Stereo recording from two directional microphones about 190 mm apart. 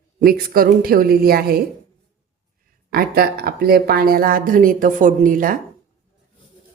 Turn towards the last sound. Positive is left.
turn(degrees=-45)  # may be behind; listen again after turning